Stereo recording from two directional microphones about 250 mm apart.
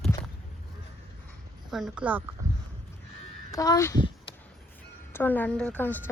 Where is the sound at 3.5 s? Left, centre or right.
Centre.